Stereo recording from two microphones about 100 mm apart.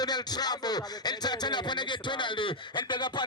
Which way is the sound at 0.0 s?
45° left (ahead or behind).